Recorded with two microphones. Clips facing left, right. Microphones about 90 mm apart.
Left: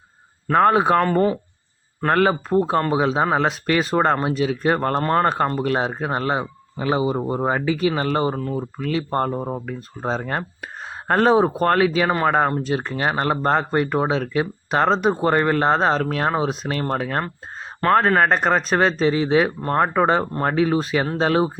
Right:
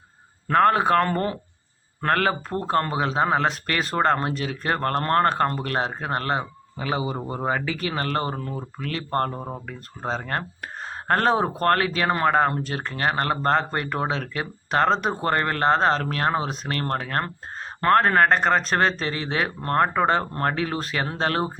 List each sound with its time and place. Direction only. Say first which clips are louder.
0.4 s speech: left 2 dB; 10° left (ahead or behind)
6.7 s speech: left 6 dB; 30° left (ahead or behind); by 21.6 s 5° left (ahead or behind)